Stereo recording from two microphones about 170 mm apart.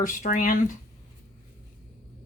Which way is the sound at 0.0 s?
50° left (ahead or behind).